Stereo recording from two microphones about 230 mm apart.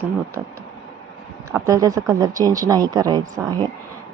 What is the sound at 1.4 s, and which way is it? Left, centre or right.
Speech, centre.